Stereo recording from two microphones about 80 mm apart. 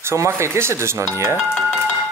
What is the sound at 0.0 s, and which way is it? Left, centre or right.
Speech, right.